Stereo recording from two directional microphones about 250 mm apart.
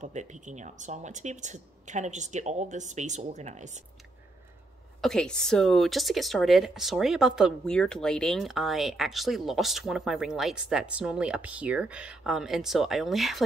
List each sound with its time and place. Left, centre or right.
0.0 s speech: right
5.0 s speech: centre